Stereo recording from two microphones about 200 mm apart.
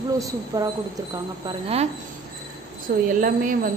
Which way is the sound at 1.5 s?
30° right (ahead or behind).